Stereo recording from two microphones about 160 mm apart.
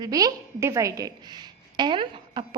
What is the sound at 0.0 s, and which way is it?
A woman's voice, 25° right (ahead or behind).